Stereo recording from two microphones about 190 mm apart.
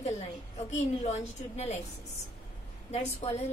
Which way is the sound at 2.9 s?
35° left (ahead or behind).